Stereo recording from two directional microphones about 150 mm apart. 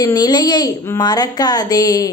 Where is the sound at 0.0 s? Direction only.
25° left (ahead or behind).